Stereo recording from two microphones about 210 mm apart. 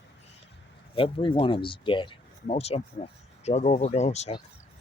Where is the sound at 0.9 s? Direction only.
25° left (ahead or behind).